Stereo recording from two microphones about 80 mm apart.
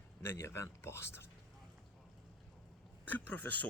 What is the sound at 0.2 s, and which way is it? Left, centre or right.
Speech, left.